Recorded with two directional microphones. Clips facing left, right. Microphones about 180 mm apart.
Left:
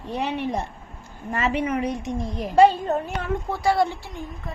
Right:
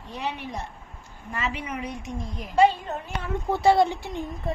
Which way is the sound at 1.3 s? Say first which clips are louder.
Left 8 dB; 50° left (ahead or behind).